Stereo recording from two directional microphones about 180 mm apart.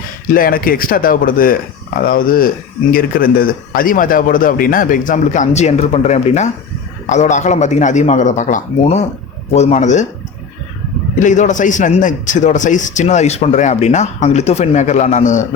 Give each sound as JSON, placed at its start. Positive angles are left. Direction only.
{"t": 0.3, "sound": "a man's voice", "side_deg": 55}
{"t": 11.2, "sound": "a man's voice", "side_deg": 45}